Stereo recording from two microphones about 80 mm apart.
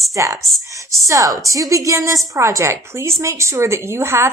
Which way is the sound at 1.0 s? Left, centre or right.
Right.